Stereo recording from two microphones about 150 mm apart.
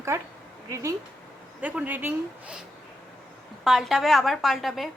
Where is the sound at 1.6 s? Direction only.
10° right (ahead or behind).